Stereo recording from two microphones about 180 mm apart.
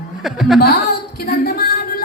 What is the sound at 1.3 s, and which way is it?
Music, 60° left (ahead or behind).